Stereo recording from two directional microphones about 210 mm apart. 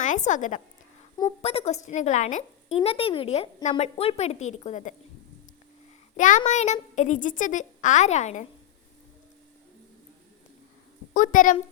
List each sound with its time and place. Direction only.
0.0 s a woman's voice: 35° left (ahead or behind)
6.1 s speech: 35° left (ahead or behind)
11.1 s a woman's voice: 40° left (ahead or behind)